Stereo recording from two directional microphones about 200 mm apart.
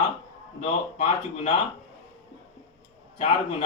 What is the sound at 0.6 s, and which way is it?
Speech, 35° left (ahead or behind).